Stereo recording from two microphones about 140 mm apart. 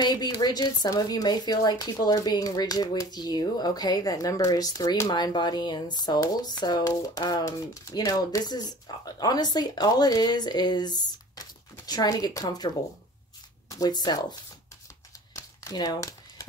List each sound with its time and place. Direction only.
0.0 s speech: 30° left (ahead or behind)
15.3 s crumpling: 30° left (ahead or behind)